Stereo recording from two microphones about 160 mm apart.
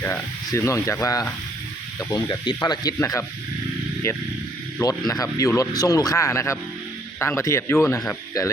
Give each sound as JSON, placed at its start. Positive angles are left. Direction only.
{"t": 0.0, "sound": "speech", "side_deg": 15}
{"t": 4.8, "sound": "speech", "side_deg": 25}